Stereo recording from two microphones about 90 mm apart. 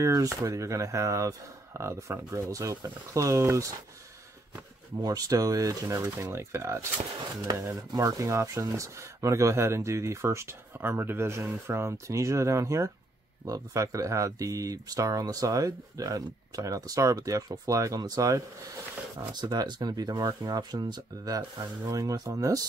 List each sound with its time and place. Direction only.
0.0 s speech: 40° right (ahead or behind)
4.9 s speech: 45° right (ahead or behind)
19.1 s speech: 55° right (ahead or behind)